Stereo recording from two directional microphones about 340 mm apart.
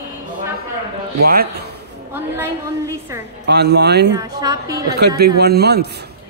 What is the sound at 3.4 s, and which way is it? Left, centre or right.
Speech, right.